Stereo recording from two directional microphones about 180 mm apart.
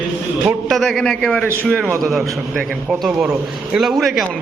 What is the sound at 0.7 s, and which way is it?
A man's voice, centre (ahead or behind).